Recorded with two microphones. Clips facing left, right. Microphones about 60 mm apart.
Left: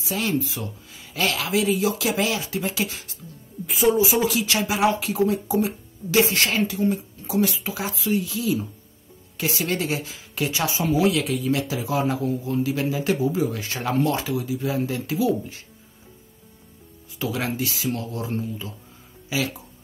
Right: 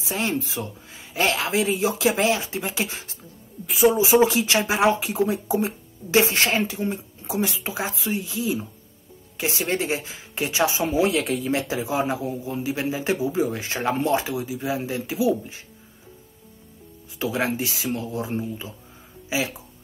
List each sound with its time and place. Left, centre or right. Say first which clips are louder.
0.0 s speech: left 1 dB; right
3.6 s a woman's voice: right 1 dB; centre
4.0 s speech: right 4 dB; right
17.2 s speech: right 2 dB; right
19.2 s a sound: even; right